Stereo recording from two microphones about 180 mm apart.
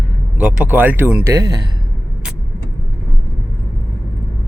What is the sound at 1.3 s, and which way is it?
Speech, 20° right (ahead or behind).